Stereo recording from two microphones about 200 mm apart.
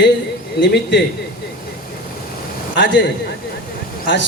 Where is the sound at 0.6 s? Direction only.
60° left (ahead or behind).